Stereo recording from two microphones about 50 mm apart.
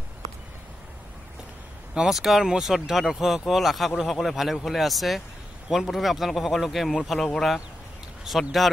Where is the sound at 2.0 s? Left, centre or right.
Centre.